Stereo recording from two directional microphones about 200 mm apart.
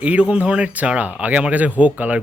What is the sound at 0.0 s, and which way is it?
A man's voice, 5° right (ahead or behind).